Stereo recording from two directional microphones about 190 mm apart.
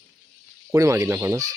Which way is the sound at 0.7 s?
15° right (ahead or behind).